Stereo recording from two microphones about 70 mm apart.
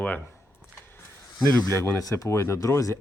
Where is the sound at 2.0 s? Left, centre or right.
Left.